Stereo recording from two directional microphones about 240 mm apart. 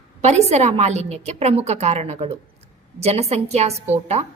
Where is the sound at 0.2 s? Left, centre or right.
Right.